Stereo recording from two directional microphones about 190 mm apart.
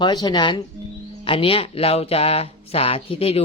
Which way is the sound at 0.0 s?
20° left (ahead or behind).